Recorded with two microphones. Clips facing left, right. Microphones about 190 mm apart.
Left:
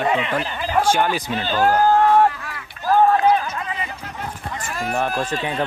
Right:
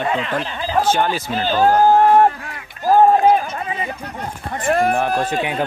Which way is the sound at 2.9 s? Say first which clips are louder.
Right 3 dB; 40° right (ahead or behind).